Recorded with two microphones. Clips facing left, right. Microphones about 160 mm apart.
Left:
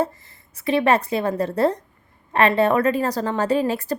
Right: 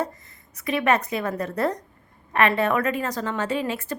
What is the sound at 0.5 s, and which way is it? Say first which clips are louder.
A woman's voice: left 4 dB; 30° left (ahead or behind).